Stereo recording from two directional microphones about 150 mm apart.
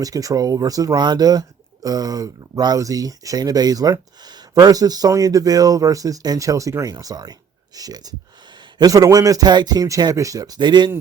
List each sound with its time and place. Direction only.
0.0 s speech: 25° right (ahead or behind)